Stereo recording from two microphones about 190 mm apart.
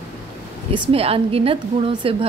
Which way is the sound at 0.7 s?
30° right (ahead or behind).